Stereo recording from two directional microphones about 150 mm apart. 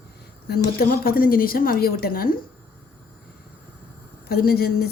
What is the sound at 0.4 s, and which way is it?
A woman's voice, 90° left.